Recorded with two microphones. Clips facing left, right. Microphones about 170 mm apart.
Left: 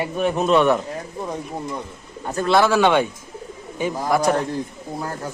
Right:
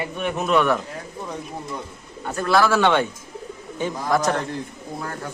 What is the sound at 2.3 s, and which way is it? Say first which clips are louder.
Speech: left 2 dB; 25° left (ahead or behind).